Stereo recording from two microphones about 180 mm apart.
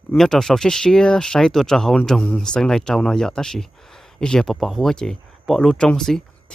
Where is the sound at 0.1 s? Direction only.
5° left (ahead or behind).